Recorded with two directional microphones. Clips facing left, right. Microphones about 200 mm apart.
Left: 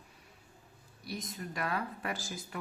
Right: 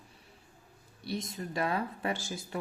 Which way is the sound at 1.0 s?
30° right (ahead or behind).